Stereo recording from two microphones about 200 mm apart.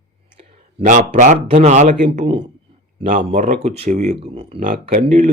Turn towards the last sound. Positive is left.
turn(degrees=-45)  # may be behind; listen again after turning